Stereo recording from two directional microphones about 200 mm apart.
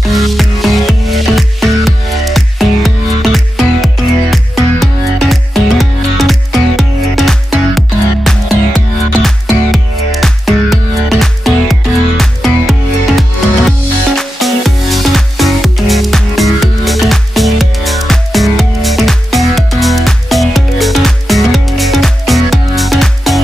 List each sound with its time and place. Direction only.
0.1 s music: centre (ahead or behind)